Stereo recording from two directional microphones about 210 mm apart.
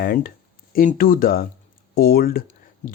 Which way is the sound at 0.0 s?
45° left (ahead or behind).